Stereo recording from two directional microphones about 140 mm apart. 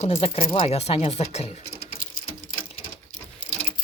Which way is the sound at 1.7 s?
90° left.